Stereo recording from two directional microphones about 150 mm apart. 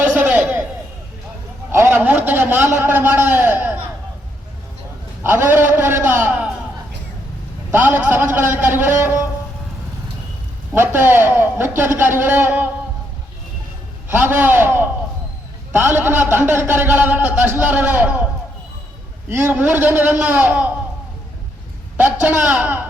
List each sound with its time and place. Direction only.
0.0 s a sound: 10° right (ahead or behind)
1.7 s a man's voice: 15° right (ahead or behind)
5.2 s a man's voice: 15° right (ahead or behind)
7.7 s a man's voice: 10° right (ahead or behind)
10.8 s a man's voice: 15° right (ahead or behind)
14.1 s a man's voice: 15° right (ahead or behind)
19.3 s a man's voice: 15° right (ahead or behind)
21.9 s a man's voice: 10° right (ahead or behind)